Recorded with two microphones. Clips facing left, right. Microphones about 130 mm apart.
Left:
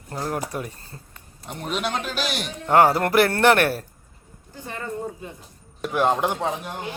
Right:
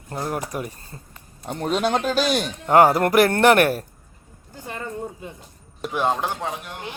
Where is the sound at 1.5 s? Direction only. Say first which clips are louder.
Right 5 dB; 40° right (ahead or behind).